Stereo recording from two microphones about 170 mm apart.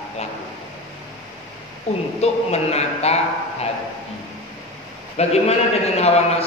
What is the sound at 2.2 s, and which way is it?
A man's voice, 40° left (ahead or behind).